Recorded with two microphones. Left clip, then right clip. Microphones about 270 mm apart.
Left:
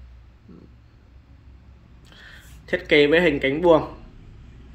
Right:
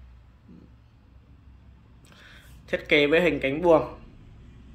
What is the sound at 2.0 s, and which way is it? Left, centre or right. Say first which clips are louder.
Speech: left 5 dB; centre.